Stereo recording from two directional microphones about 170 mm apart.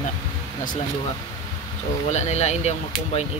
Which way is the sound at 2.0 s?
40° left (ahead or behind).